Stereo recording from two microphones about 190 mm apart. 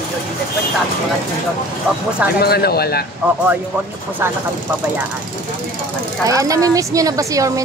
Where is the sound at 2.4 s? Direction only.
55° left (ahead or behind).